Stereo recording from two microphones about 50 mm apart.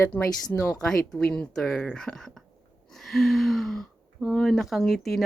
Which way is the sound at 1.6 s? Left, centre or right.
Centre.